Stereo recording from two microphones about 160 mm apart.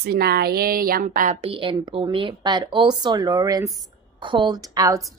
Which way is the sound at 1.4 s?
35° right (ahead or behind).